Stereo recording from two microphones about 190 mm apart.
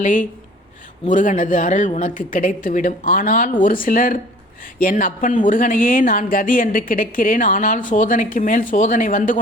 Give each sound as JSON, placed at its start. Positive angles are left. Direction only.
{"t": 0.0, "sound": "a woman's voice", "side_deg": 45}